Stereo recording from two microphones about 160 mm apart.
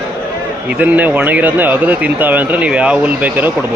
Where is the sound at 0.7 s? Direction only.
10° right (ahead or behind).